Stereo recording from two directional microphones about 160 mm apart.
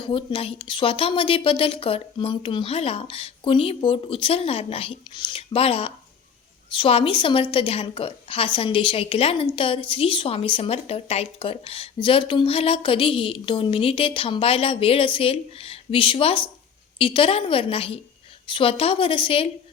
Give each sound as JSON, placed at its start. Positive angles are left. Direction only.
{"t": 0.0, "sound": "speech", "side_deg": 30}